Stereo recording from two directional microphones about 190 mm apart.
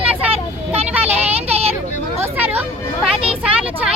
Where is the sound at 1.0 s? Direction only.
35° right (ahead or behind).